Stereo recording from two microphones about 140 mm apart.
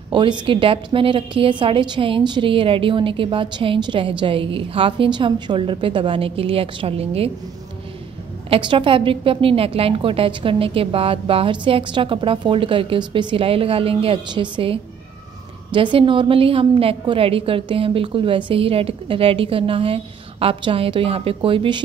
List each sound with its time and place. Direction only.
0.1 s a woman's voice: 35° right (ahead or behind)
8.5 s a woman's voice: 35° right (ahead or behind)